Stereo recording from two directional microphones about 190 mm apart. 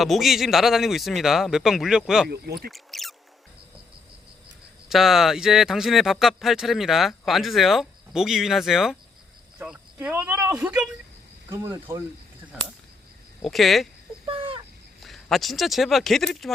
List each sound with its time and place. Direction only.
0.0 s speech: centre (ahead or behind)
2.3 s speech: 55° right (ahead or behind)
2.6 s rodents: centre (ahead or behind)
4.9 s speech: centre (ahead or behind)
13.4 s speech: centre (ahead or behind)
14.3 s a sound: 30° right (ahead or behind)
15.0 s speech: centre (ahead or behind)